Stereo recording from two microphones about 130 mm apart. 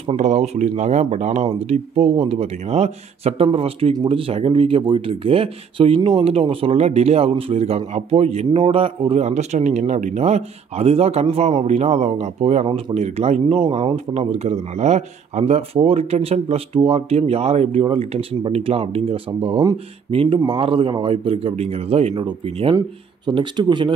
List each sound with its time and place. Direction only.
0.0 s speech: 60° right (ahead or behind)
13.6 s speech: 40° right (ahead or behind)
14.1 s speech: 55° right (ahead or behind); by 23.9 s 35° right (ahead or behind)